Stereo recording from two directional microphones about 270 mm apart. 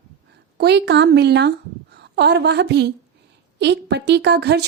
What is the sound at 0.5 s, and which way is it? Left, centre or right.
A woman's voice, right.